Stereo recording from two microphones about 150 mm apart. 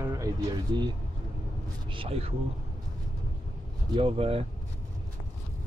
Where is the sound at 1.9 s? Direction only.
40° right (ahead or behind).